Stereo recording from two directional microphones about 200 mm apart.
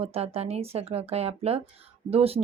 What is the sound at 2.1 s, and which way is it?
Speech, 30° right (ahead or behind).